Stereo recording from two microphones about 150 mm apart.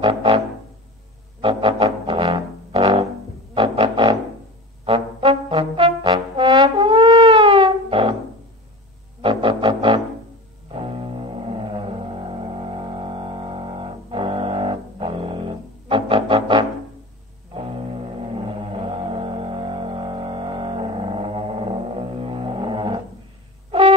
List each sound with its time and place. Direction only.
0.0 s music: 35° right (ahead or behind)
1.4 s music: 35° right (ahead or behind)
4.8 s brass instrument: 40° right (ahead or behind)
9.2 s didgeridoo: 35° right (ahead or behind)
10.7 s music: 35° right (ahead or behind)